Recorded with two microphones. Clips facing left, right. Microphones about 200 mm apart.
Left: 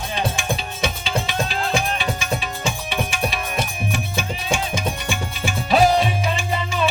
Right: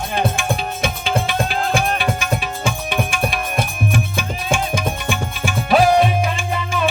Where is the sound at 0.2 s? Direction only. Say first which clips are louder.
Right 4 dB; 55° right (ahead or behind).